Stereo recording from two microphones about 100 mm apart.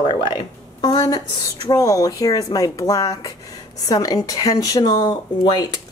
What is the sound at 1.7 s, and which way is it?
Speech, 35° left (ahead or behind).